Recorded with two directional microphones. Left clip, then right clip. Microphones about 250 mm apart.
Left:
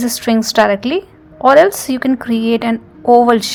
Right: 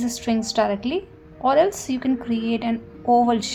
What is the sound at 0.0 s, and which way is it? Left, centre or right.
A woman's voice, left.